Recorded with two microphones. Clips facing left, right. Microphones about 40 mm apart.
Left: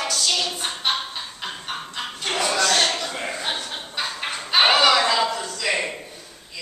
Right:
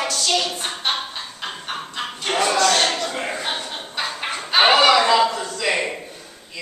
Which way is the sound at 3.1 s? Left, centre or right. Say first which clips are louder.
Right 2 dB; centre.